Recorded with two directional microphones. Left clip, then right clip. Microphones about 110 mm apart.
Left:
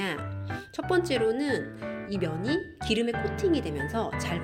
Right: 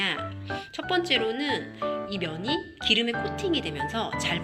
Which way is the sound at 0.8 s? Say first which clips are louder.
Even; 85° left.